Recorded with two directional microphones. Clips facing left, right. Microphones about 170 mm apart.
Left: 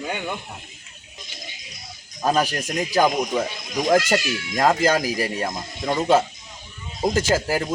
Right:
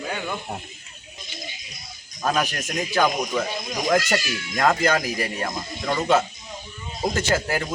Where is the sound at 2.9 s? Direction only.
15° left (ahead or behind).